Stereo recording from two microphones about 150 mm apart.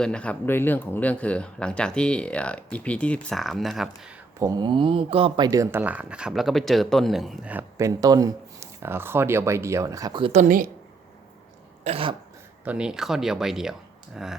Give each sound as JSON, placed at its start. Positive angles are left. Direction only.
{"t": 0.0, "sound": "speech", "side_deg": 5}
{"t": 4.4, "sound": "speech", "side_deg": -25}
{"t": 5.5, "sound": "speech", "side_deg": -20}
{"t": 5.8, "sound": "speech", "side_deg": -10}
{"t": 7.5, "sound": "speech", "side_deg": -20}
{"t": 10.3, "sound": "speech", "side_deg": -60}
{"t": 11.8, "sound": "cough", "side_deg": -40}
{"t": 12.6, "sound": "speech", "side_deg": -5}